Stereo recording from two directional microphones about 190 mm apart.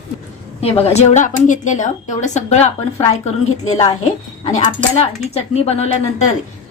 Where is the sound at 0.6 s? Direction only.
35° left (ahead or behind).